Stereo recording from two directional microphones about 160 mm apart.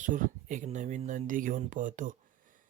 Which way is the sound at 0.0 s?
55° right (ahead or behind).